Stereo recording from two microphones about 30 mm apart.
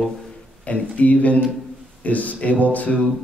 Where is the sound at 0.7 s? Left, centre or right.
Left.